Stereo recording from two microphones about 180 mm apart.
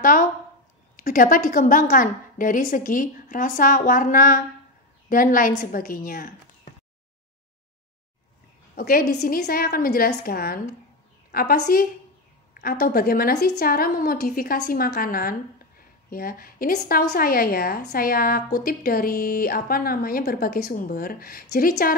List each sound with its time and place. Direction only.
0.0 s a woman's voice: 50° left (ahead or behind)
8.7 s a woman's voice: 55° left (ahead or behind)